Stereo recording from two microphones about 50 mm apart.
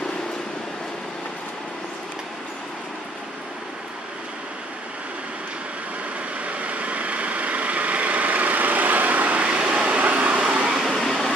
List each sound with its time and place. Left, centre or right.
6.4 s vehicle: right
10.9 s vehicle: centre